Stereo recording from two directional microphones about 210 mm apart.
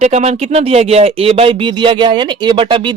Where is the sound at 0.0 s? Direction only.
30° right (ahead or behind).